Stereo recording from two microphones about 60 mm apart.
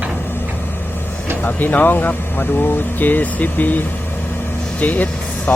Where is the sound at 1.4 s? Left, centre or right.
Left.